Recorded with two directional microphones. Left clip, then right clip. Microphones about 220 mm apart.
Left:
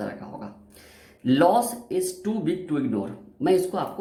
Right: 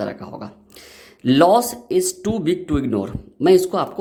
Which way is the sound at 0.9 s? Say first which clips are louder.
Right 5 dB; 50° right (ahead or behind).